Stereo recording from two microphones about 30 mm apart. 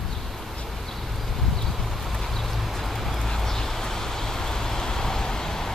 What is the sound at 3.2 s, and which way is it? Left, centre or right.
Vehicle, centre.